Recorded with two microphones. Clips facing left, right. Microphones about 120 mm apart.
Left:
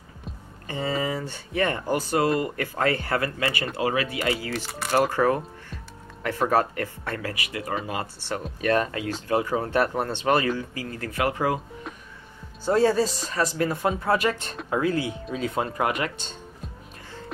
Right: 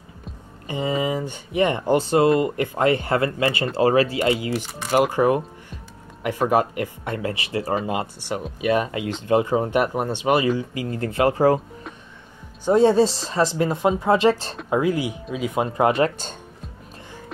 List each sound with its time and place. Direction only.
0.7 s speech: 15° right (ahead or behind); by 4.2 s 35° right (ahead or behind)
4.2 s speech: 20° right (ahead or behind)
9.0 s speech: 25° right (ahead or behind)
12.6 s speech: 20° right (ahead or behind)
14.7 s speech: 15° right (ahead or behind)